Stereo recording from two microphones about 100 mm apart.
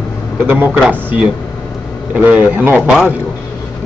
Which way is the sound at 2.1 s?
15° right (ahead or behind).